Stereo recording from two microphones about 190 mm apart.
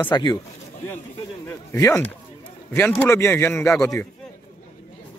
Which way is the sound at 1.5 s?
15° left (ahead or behind).